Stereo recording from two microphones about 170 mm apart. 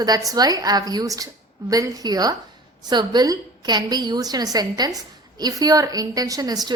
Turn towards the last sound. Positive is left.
turn(degrees=-20)  # may be behind; listen again after turning